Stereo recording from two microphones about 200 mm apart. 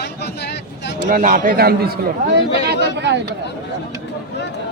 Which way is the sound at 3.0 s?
60° right (ahead or behind).